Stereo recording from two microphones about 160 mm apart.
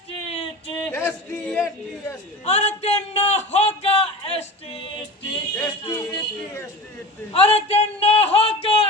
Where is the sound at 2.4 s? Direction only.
45° left (ahead or behind).